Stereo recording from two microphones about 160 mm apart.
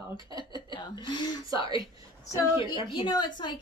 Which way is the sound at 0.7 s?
30° left (ahead or behind).